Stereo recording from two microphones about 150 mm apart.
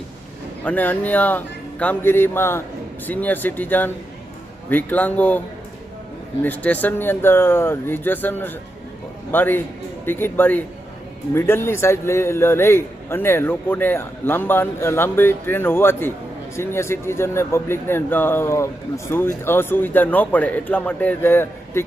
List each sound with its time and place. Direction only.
0.6 s speech: 10° left (ahead or behind)
6.4 s speech: 10° left (ahead or behind)